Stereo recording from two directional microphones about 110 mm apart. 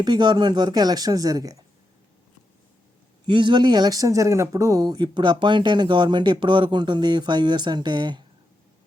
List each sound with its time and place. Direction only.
0.0 s speech: 40° right (ahead or behind)
3.2 s speech: 45° right (ahead or behind)